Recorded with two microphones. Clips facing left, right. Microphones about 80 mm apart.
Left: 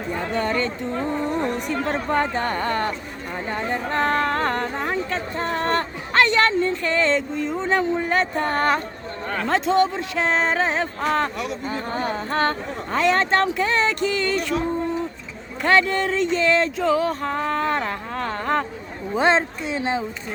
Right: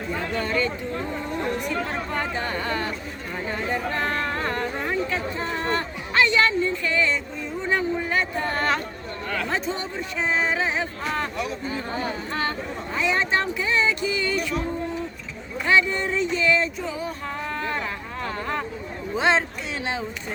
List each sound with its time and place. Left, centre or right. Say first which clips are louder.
0.2 s speech: left 2 dB; left
1.9 s speech: left 6 dB; left
8.1 s speech: left 4 dB; left
9.5 s speech: left 9 dB; left
10.5 s speech: left 3 dB; left
15.6 s speech: left 3 dB; left
17.2 s speech: left 6 dB; left
19.1 s speech: left 3 dB; left